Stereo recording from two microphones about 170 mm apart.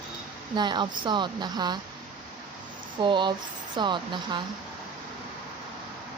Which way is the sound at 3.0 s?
30° right (ahead or behind).